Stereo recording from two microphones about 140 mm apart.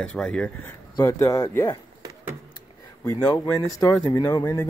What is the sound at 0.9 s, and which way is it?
Speech, 25° left (ahead or behind).